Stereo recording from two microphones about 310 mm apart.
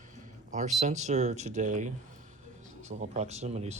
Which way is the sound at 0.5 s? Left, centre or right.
Right.